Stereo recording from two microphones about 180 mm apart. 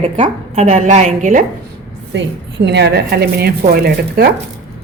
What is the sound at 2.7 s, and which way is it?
Speech, 70° right (ahead or behind).